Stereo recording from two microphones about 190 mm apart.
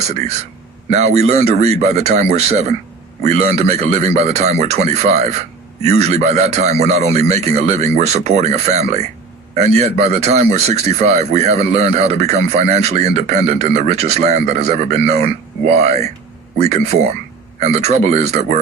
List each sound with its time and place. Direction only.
0.0 s a man's voice: 35° right (ahead or behind)